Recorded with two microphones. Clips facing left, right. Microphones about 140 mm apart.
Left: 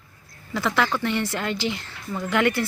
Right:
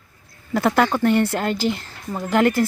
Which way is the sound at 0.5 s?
50° right (ahead or behind).